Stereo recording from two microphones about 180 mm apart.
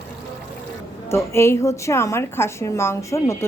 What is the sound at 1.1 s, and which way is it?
A woman's voice, 15° left (ahead or behind).